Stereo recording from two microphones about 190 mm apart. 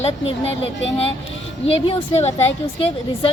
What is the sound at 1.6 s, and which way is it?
Speech, 35° left (ahead or behind).